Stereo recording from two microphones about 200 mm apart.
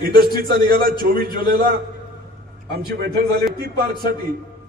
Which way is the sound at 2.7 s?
50° right (ahead or behind).